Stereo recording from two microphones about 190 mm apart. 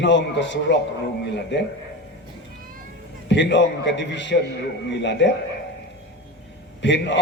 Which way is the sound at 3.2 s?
70° left (ahead or behind).